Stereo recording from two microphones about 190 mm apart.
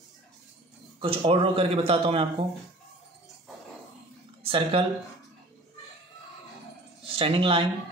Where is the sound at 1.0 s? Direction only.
25° right (ahead or behind).